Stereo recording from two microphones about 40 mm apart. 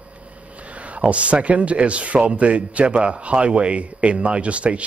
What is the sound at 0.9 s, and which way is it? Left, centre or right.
A man's voice, right.